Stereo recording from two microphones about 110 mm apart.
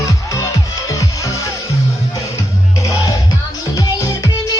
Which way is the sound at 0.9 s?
30° left (ahead or behind).